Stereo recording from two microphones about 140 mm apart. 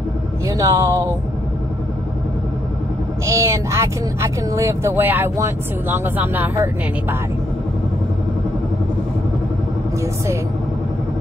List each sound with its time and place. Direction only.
0.5 s speech: 25° right (ahead or behind)
3.3 s speech: 20° right (ahead or behind)